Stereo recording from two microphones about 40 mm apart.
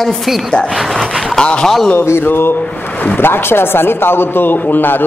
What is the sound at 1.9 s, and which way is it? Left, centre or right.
A man's voice, left.